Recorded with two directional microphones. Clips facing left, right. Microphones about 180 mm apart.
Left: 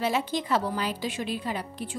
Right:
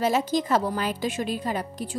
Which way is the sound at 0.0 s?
40° right (ahead or behind).